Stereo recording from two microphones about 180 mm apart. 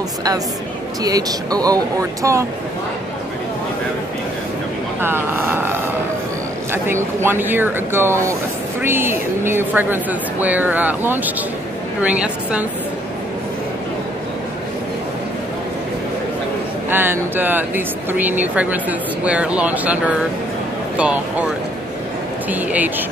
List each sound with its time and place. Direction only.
1.0 s speech: 20° right (ahead or behind)
5.0 s speech: 10° right (ahead or behind)
16.9 s speech: 10° right (ahead or behind)
21.0 s speech: 10° right (ahead or behind)
22.5 s speech: 10° right (ahead or behind)